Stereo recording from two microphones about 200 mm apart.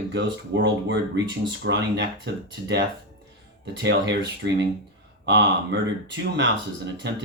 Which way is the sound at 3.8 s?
60° right (ahead or behind).